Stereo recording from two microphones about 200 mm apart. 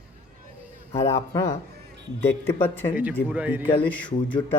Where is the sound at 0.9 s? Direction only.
15° left (ahead or behind).